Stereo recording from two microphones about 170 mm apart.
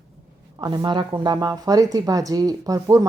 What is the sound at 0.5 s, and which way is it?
Speech, 25° right (ahead or behind).